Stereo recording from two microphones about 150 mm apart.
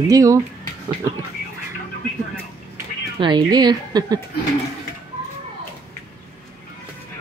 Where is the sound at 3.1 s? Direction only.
30° right (ahead or behind).